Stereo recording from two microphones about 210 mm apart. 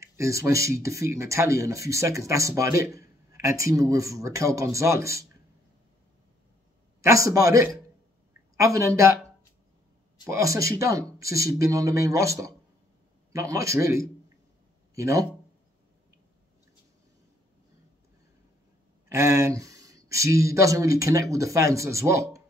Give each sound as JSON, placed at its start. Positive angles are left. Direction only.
{"t": 0.0, "sound": "speech", "side_deg": -15}
{"t": 7.0, "sound": "speech", "side_deg": -15}
{"t": 8.3, "sound": "a sound", "side_deg": -15}
{"t": 10.2, "sound": "speech", "side_deg": -15}
{"t": 19.0, "sound": "speech", "side_deg": -15}